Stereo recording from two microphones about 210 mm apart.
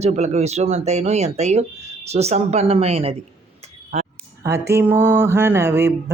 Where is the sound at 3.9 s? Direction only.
30° right (ahead or behind).